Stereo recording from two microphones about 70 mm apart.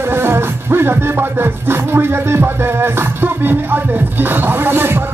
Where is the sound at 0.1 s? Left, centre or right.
Right.